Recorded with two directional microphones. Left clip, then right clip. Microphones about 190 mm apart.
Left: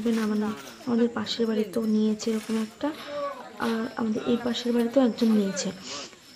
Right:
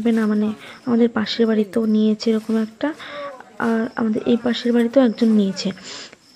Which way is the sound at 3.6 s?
20° right (ahead or behind).